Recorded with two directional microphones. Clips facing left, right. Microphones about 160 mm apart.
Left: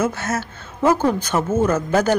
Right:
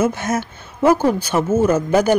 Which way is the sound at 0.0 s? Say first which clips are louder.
Right 3 dB; 15° right (ahead or behind).